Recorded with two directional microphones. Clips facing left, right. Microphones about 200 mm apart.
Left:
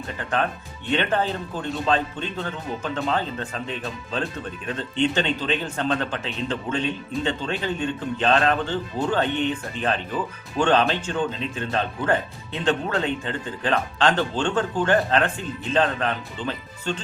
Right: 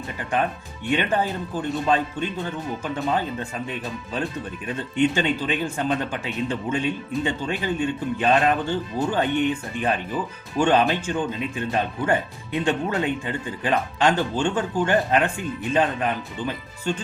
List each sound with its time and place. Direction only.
0.2 s speech: 10° right (ahead or behind)
4.8 s speech: 10° right (ahead or behind)